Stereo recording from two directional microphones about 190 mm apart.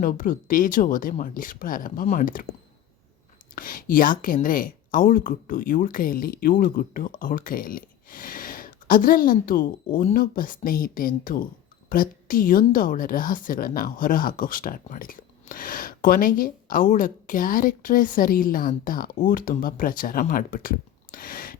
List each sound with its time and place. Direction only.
0.0 s speech: 45° left (ahead or behind)
3.5 s a woman's voice: 45° left (ahead or behind)